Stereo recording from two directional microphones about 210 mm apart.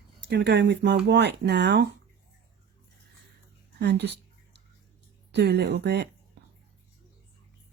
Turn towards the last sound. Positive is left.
turn(degrees=-55)  # may be behind; listen again after turning